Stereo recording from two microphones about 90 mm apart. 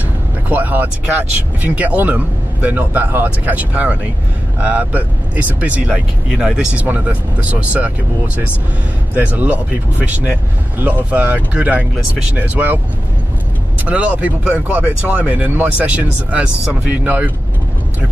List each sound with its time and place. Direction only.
0.5 s speech: 20° right (ahead or behind)
9.1 s speech: 20° right (ahead or behind)
13.8 s speech: 15° right (ahead or behind)